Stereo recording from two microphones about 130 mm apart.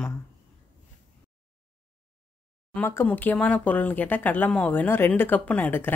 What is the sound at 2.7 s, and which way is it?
A woman's voice, 15° left (ahead or behind).